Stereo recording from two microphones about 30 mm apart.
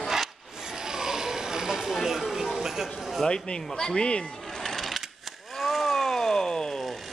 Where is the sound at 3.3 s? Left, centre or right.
Left.